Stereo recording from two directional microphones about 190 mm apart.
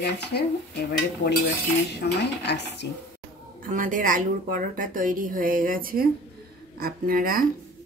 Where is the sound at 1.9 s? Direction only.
60° left (ahead or behind).